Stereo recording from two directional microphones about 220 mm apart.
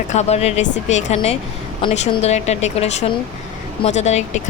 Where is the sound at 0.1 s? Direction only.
30° left (ahead or behind).